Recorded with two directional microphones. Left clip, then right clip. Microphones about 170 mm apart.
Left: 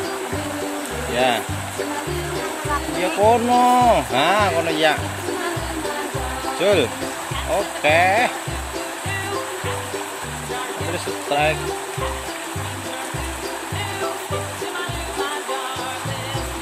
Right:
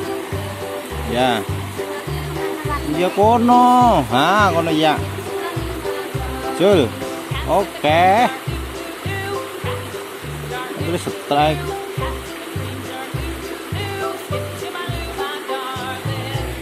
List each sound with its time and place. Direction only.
1.1 s speech: 25° right (ahead or behind)
3.0 s speech: 30° right (ahead or behind)
6.6 s speech: 25° right (ahead or behind)
11.2 s speech: 25° right (ahead or behind)